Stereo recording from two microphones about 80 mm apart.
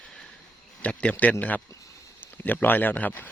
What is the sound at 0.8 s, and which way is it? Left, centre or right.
Speech, centre.